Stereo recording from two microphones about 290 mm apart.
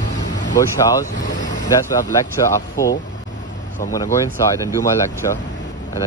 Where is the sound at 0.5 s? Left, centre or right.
Centre.